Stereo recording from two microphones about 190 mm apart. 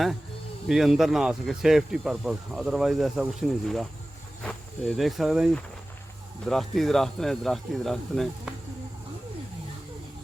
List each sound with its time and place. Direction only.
0.7 s speech: centre (ahead or behind)